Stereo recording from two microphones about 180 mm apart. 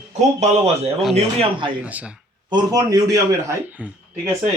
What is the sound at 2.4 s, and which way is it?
A man's voice, 20° right (ahead or behind).